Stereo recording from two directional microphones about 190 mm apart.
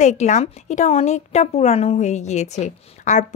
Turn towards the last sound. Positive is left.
turn(degrees=40)  # may be behind; listen again after turning